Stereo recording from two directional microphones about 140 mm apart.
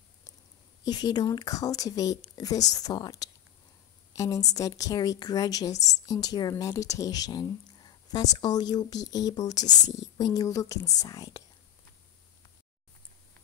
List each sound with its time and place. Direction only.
0.8 s a woman's voice: 30° left (ahead or behind)